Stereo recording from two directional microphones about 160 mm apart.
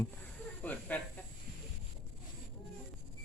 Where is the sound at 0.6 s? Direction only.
10° left (ahead or behind).